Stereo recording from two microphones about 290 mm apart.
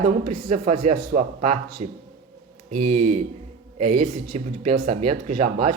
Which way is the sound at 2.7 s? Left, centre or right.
Right.